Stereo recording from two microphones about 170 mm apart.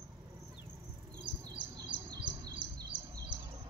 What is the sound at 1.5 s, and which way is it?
Chirp, 25° right (ahead or behind).